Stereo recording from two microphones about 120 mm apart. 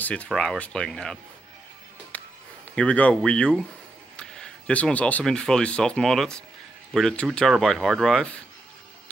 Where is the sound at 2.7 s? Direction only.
10° left (ahead or behind).